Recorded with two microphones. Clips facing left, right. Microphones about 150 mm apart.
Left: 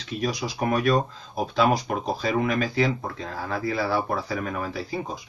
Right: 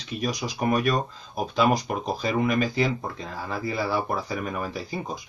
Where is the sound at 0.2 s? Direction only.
5° right (ahead or behind).